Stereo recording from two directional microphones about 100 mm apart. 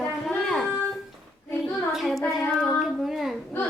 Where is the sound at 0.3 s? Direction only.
Centre (ahead or behind).